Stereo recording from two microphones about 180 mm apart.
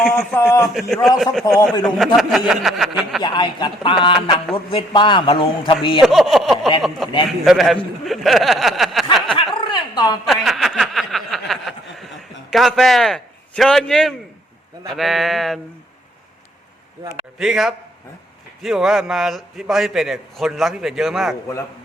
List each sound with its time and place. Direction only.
0.0 s a man's voice: 5° left (ahead or behind)
3.2 s a man's voice: 25° left (ahead or behind)
6.0 s a man's voice: centre (ahead or behind)
9.2 s a sound: 30° left (ahead or behind)
10.2 s a man's voice: centre (ahead or behind)
17.3 s a man's voice: 5° right (ahead or behind)